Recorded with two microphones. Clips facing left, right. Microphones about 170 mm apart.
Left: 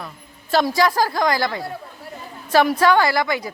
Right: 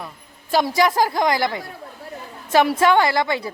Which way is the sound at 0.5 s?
20° right (ahead or behind).